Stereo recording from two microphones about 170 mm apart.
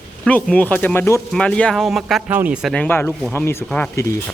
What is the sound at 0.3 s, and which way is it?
Speech, 10° left (ahead or behind).